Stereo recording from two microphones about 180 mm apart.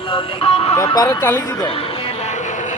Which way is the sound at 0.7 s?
20° left (ahead or behind).